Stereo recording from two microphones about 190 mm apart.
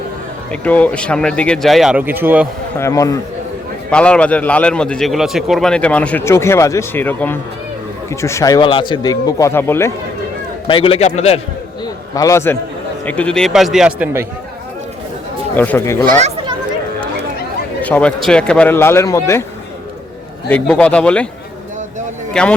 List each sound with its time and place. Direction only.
0.5 s speech: 5° left (ahead or behind); by 2.5 s 10° right (ahead or behind)
2.7 s a man's voice: 15° left (ahead or behind)
3.8 s a man's voice: 5° left (ahead or behind)
10.7 s a man's voice: 30° left (ahead or behind)
12.1 s a man's voice: 15° left (ahead or behind); by 14.3 s 10° right (ahead or behind)
15.5 s a man's voice: 10° left (ahead or behind)
17.8 s a man's voice: 5° left (ahead or behind)
20.5 s a man's voice: 5° left (ahead or behind)
22.3 s speech: 5° left (ahead or behind)